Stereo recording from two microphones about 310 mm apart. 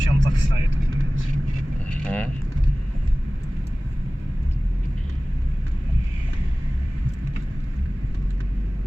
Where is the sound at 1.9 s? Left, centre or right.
Centre.